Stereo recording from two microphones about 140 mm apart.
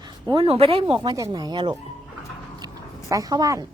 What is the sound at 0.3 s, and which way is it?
Speech, 45° right (ahead or behind).